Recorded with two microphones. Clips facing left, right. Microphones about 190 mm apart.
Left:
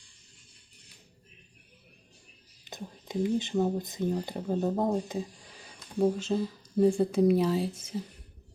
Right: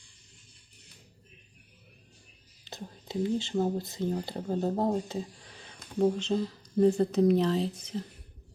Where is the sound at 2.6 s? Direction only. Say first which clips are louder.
Left 1 dB; 15° left (ahead or behind).